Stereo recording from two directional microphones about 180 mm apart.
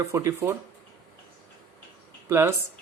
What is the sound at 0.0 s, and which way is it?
Speech, 15° right (ahead or behind).